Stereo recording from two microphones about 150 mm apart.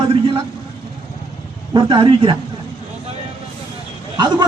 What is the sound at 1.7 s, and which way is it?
Speech, 35° right (ahead or behind).